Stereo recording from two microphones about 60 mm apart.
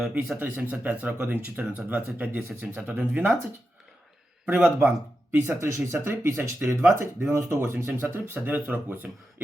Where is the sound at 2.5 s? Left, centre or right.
Centre.